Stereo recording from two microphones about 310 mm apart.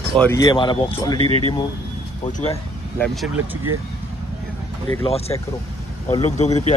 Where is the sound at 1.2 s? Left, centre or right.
Centre.